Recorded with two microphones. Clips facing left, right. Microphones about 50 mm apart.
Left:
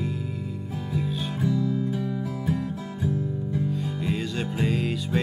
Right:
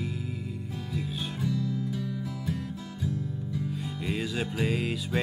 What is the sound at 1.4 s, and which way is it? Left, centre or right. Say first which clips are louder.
Music: left 6 dB; centre.